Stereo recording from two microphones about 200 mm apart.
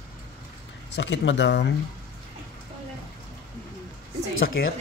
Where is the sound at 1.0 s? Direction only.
65° left (ahead or behind).